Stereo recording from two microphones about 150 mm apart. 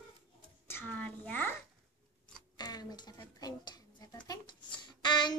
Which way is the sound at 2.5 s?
25° left (ahead or behind).